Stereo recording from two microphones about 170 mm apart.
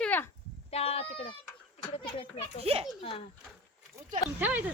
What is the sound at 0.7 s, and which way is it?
Speech, 35° left (ahead or behind).